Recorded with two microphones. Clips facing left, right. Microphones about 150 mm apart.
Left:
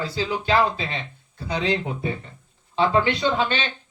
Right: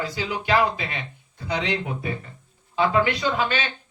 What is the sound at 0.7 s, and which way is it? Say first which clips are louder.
Speech: left 2 dB; 30° left (ahead or behind).